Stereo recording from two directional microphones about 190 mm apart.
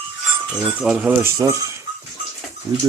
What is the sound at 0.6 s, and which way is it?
Speech, 5° right (ahead or behind).